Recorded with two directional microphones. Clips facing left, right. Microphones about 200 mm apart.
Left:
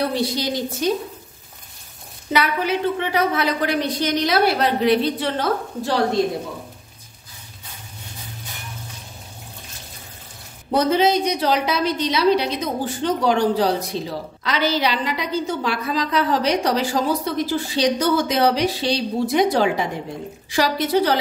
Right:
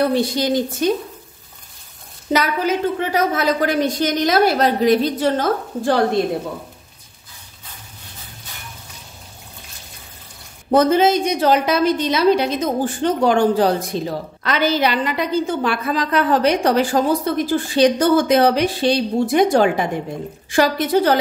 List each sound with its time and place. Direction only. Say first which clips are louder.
0.1 s a woman's voice: right 5 dB; 50° right (ahead or behind)
2.3 s a woman's voice: right 2 dB; 45° right (ahead or behind)
10.7 s a woman's voice: right 3 dB; 50° right (ahead or behind)